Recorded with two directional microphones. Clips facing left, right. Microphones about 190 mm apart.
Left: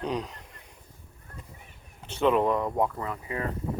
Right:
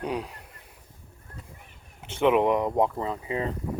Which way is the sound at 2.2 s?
15° right (ahead or behind).